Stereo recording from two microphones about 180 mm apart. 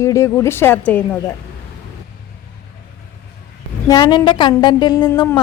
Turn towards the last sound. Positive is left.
turn(degrees=25)  # may be behind; listen again after turning